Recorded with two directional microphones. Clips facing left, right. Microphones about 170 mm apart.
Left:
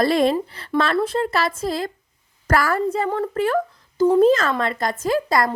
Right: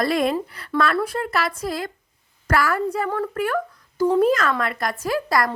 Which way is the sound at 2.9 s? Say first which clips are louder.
Left 2 dB; 20° left (ahead or behind).